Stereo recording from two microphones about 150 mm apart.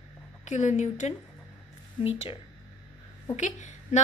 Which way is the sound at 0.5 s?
50° left (ahead or behind).